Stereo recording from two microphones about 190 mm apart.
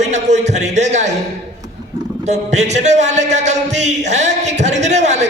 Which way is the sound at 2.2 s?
35° right (ahead or behind).